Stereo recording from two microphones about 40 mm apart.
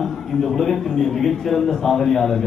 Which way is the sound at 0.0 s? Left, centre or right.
Centre.